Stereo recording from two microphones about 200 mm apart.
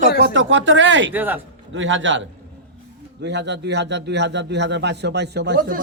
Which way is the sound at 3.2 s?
60° right (ahead or behind).